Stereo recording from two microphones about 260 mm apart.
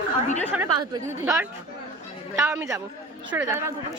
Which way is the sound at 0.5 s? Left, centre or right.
Centre.